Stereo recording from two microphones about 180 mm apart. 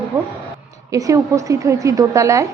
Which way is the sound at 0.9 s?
20° right (ahead or behind).